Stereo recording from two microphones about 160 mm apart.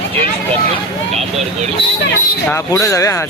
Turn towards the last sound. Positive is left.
turn(degrees=20)  # may be behind; listen again after turning